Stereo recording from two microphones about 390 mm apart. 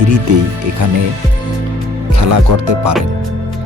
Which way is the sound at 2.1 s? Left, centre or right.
Right.